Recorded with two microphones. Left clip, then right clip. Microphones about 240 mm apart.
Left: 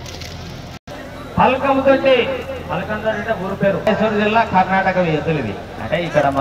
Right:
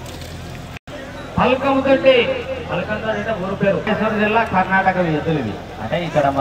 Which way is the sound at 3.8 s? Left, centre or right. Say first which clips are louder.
Left 2 dB; left.